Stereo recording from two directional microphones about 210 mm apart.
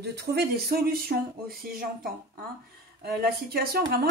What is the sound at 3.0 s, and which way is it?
Speech, 45° right (ahead or behind).